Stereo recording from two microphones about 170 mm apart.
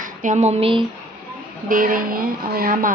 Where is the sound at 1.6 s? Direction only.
55° right (ahead or behind).